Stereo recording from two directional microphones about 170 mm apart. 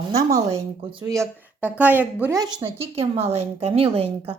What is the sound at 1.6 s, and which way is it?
Speech, 10° right (ahead or behind).